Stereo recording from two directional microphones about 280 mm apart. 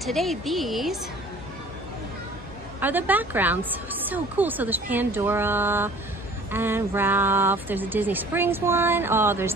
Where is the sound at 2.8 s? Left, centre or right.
Centre.